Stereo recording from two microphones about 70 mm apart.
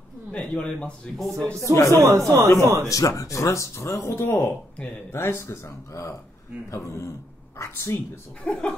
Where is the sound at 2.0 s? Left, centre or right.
Right.